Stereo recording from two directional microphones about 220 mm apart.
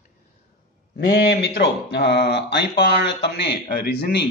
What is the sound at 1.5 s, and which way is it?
A man's voice, 50° left (ahead or behind).